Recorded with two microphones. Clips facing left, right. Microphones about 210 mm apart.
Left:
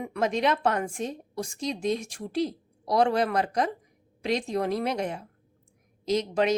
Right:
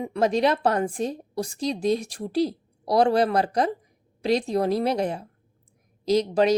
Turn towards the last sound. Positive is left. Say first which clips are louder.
# right 4 dB
turn(degrees=-35)  # may be behind; listen again after turning